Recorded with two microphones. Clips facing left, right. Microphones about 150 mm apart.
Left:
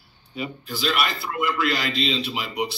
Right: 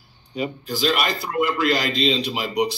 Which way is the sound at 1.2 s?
40° right (ahead or behind).